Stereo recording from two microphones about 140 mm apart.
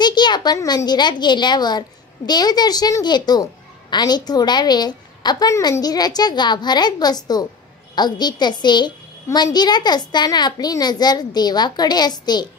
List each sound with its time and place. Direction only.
0.0 s a child's voice: 30° left (ahead or behind)